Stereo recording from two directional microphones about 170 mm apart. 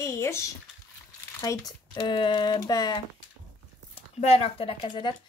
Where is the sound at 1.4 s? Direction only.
20° left (ahead or behind).